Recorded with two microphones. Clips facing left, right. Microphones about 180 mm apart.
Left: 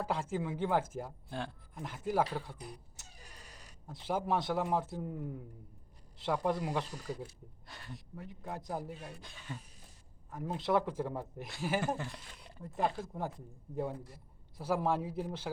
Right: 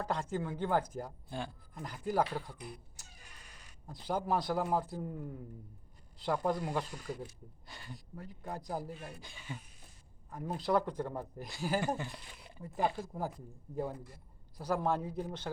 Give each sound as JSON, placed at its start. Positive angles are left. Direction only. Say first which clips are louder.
{"t": 0.0, "sound": "speech", "louder": "even", "side_deg": 5}
{"t": 3.0, "sound": "cat", "louder": "left 1 dB", "side_deg": 0}
{"t": 3.8, "sound": "speech", "louder": "even", "side_deg": 0}